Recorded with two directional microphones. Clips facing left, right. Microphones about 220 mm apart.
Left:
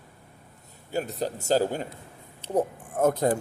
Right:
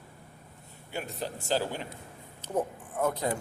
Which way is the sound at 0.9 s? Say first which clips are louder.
Left 7 dB; 40° left (ahead or behind).